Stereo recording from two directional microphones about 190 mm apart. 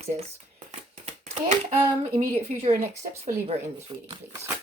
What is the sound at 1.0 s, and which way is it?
Shuffling cards, 35° right (ahead or behind).